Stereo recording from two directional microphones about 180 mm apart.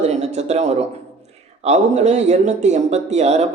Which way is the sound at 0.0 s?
35° right (ahead or behind).